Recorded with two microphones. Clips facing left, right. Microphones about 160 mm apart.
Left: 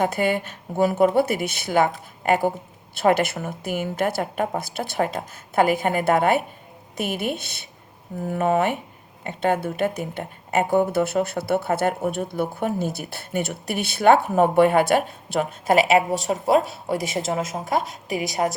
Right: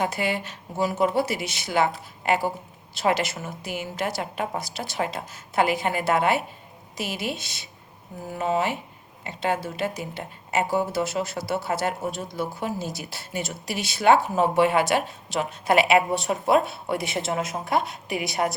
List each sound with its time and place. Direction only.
0.0 s speech: 50° left (ahead or behind)